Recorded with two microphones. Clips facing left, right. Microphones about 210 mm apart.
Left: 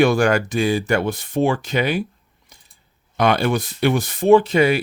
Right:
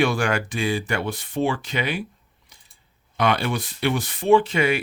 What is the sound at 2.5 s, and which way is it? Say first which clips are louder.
Scissors: left 5 dB; 45° left (ahead or behind).